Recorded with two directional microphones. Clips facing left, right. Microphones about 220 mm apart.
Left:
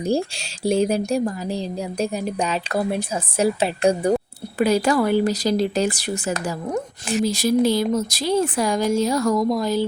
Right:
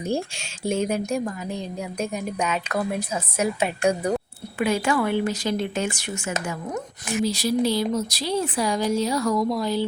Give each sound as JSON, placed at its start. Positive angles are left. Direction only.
{"t": 0.0, "sound": "speech", "side_deg": 35}
{"t": 7.3, "sound": "speech", "side_deg": 45}